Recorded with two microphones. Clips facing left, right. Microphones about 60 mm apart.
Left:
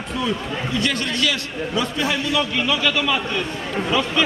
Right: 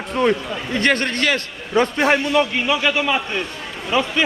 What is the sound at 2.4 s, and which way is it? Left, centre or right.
Speech, right.